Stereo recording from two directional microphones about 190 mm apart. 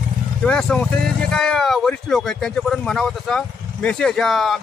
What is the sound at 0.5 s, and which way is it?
Speech, 5° left (ahead or behind).